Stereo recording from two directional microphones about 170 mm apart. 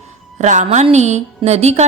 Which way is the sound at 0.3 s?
45° right (ahead or behind).